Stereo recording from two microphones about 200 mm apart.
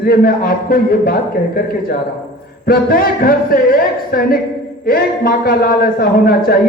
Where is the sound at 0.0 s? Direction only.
50° left (ahead or behind).